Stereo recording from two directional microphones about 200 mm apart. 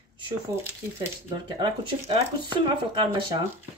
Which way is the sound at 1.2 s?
25° right (ahead or behind).